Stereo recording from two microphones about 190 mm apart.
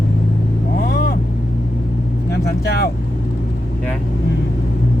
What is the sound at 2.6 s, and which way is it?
Speech, 60° left (ahead or behind).